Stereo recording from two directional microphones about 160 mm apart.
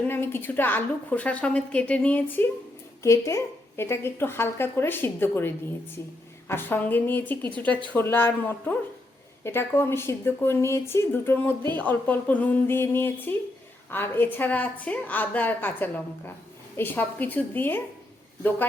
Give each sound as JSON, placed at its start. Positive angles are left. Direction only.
{"t": 0.0, "sound": "a woman's voice", "side_deg": 15}